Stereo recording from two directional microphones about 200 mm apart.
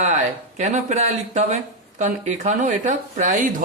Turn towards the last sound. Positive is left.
turn(degrees=-40)  # may be behind; listen again after turning